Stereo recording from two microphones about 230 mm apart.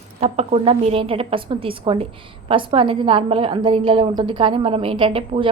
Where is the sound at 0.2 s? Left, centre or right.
Right.